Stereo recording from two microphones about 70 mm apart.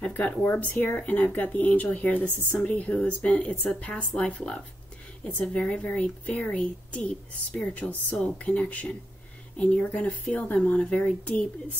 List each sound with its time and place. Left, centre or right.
0.1 s speech: left
9.8 s speech: left